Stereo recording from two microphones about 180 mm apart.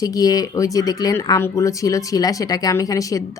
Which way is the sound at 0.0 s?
20° left (ahead or behind).